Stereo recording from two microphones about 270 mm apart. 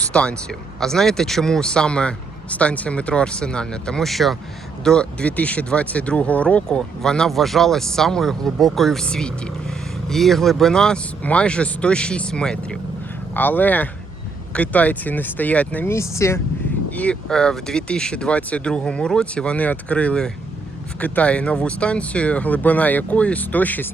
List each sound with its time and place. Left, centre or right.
0.1 s speech: centre